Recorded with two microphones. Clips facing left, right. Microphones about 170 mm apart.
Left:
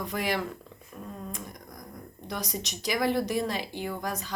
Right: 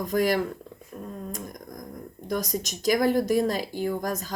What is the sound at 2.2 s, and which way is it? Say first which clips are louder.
Speech: right 6 dB; 40° right (ahead or behind).